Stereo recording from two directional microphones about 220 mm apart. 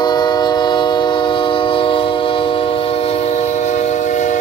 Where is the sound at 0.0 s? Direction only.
20° left (ahead or behind).